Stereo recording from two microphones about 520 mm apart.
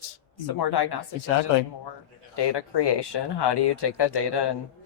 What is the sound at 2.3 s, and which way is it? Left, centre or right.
Speech, left.